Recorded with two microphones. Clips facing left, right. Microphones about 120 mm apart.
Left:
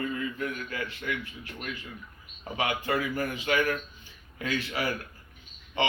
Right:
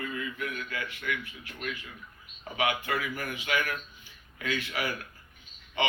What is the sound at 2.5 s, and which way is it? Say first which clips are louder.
Speech: left 1 dB; 30° left (ahead or behind).